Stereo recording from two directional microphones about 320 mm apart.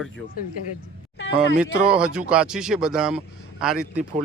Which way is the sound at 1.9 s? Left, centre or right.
Centre.